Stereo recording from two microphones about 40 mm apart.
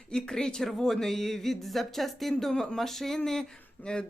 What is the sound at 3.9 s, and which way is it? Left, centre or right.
Speech, left.